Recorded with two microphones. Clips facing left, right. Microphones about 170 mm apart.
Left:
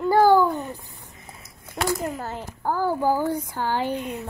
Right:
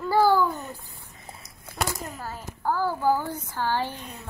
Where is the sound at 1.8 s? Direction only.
20° left (ahead or behind).